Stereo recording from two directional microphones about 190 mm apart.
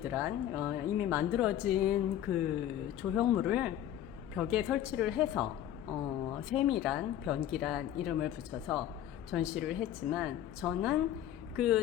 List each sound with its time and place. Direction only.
0.0 s a woman's voice: 10° right (ahead or behind)
6.5 s speech: centre (ahead or behind)